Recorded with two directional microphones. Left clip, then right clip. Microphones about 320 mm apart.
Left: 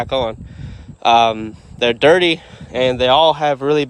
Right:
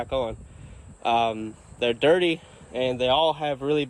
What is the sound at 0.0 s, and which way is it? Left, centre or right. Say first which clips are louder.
Speech: left 8 dB; left.